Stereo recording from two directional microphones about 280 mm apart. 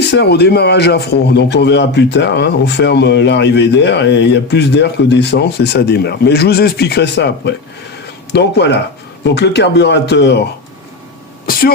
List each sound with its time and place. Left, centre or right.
0.1 s a man's voice: left